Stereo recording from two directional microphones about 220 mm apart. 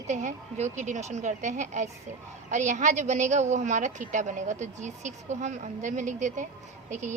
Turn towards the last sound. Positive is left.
turn(degrees=-35)  # may be behind; listen again after turning